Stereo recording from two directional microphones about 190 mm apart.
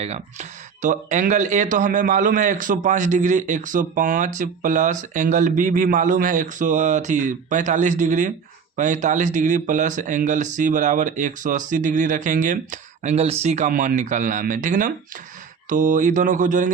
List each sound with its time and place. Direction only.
0.0 s speech: 35° right (ahead or behind)